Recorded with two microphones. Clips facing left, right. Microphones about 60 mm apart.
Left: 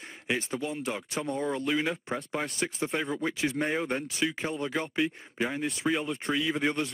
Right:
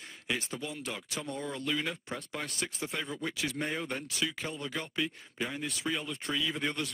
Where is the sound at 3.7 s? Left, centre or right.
Centre.